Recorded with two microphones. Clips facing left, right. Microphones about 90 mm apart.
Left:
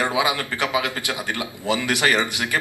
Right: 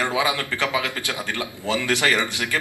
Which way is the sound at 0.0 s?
20° left (ahead or behind).